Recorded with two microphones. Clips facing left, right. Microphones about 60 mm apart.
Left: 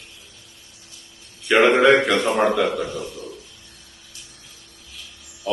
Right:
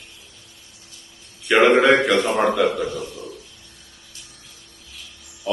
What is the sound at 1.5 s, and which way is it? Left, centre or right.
A man's voice, centre.